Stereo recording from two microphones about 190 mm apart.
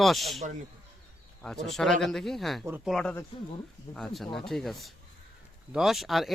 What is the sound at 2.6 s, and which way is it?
Speech, 10° right (ahead or behind).